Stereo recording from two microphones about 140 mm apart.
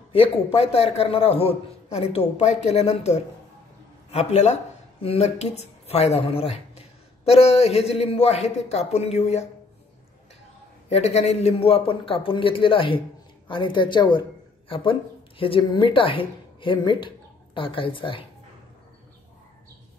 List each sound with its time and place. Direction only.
0.1 s a man's voice: 40° left (ahead or behind)
10.9 s a man's voice: 50° left (ahead or behind)